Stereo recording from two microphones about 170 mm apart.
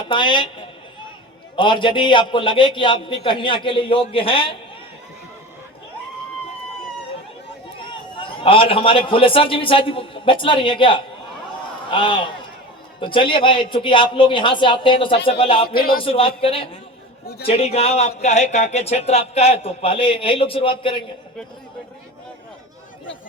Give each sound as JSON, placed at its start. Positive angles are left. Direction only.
{"t": 0.1, "sound": "a man's voice", "side_deg": 30}
{"t": 1.5, "sound": "a man's voice", "side_deg": 30}
{"t": 8.2, "sound": "a man's voice", "side_deg": 30}
{"t": 15.7, "sound": "speech", "side_deg": 60}
{"t": 16.0, "sound": "speech", "side_deg": 35}